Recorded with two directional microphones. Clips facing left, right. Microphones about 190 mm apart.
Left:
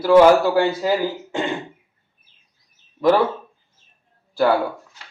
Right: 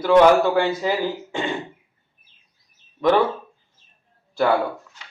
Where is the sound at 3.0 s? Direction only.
5° left (ahead or behind).